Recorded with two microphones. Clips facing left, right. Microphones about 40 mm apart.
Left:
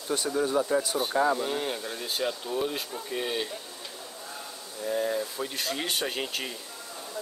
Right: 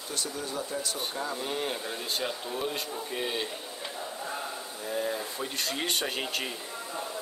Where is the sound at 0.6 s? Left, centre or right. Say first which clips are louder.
Left 8 dB; left.